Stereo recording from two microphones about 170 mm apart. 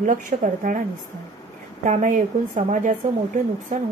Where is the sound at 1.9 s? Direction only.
45° right (ahead or behind).